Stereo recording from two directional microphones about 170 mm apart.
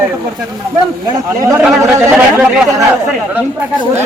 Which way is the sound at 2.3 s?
5° right (ahead or behind).